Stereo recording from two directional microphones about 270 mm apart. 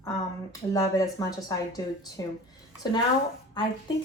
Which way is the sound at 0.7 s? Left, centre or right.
Centre.